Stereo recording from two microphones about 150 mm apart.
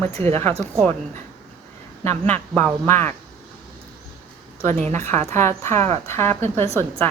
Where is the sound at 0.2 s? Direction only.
40° right (ahead or behind).